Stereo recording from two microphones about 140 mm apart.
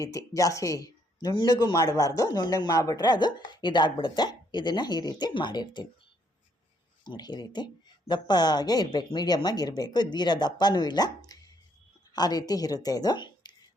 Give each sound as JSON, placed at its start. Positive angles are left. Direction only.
{"t": 0.0, "sound": "speech", "side_deg": 25}
{"t": 7.0, "sound": "a woman's voice", "side_deg": 30}